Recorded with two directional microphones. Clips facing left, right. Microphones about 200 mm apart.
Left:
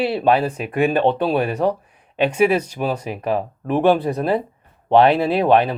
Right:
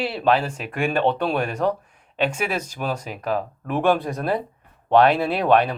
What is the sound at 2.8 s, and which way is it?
Speech, 10° left (ahead or behind).